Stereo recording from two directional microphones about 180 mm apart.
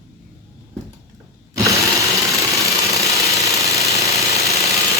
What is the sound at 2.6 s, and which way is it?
Engine, 15° right (ahead or behind).